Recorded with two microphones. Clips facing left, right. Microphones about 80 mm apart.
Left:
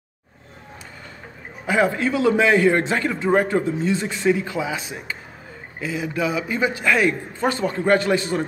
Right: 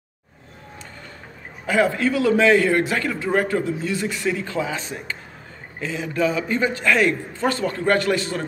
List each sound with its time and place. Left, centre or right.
1.7 s a man's voice: left